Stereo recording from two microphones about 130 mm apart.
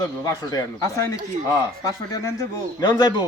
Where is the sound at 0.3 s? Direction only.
25° left (ahead or behind).